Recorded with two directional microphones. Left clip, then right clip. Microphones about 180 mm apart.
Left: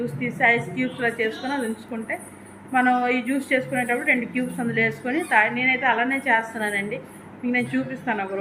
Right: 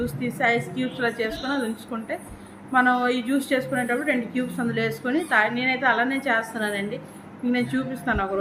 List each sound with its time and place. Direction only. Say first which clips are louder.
0.0 s a woman's voice: left 3 dB; 15° right (ahead or behind)
2.7 s a woman's voice: even; 15° right (ahead or behind)